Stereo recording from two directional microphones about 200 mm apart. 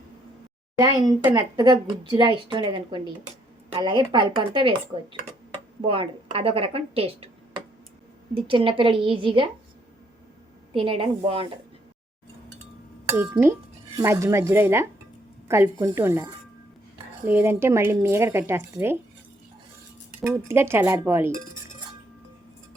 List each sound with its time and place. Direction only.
0.8 s a woman's voice: 20° right (ahead or behind)
5.8 s speech: 25° right (ahead or behind)
10.8 s speech: 25° right (ahead or behind)
13.1 s speech: 10° right (ahead or behind)
20.2 s speech: 10° right (ahead or behind)